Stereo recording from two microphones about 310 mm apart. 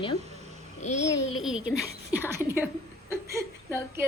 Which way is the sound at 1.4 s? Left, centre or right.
Centre.